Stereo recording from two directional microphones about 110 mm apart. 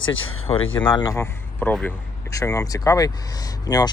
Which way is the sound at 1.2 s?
15° left (ahead or behind).